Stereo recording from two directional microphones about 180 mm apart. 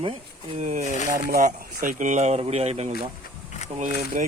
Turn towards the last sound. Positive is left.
turn(degrees=-40)  # may be behind; listen again after turning